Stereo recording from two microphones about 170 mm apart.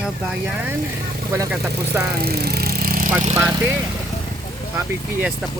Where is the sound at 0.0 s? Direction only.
15° right (ahead or behind).